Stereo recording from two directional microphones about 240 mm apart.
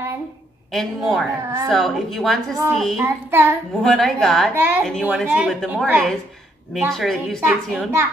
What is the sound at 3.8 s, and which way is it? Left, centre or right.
A woman's voice, centre.